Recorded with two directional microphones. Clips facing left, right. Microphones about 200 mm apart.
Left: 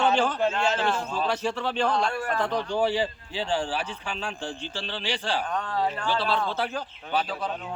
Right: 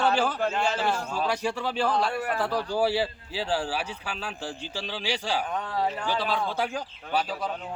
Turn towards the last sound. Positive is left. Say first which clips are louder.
# even
turn(degrees=-10)  # may be behind; listen again after turning